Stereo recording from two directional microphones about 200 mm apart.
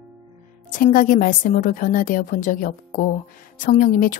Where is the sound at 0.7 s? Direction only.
45° left (ahead or behind).